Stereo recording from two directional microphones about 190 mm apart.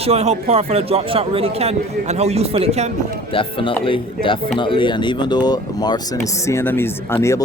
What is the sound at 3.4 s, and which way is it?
Speech, 25° left (ahead or behind).